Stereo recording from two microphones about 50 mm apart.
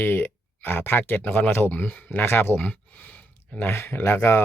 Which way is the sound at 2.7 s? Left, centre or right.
Left.